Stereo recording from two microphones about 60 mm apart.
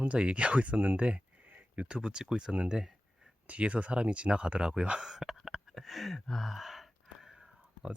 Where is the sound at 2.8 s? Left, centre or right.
Centre.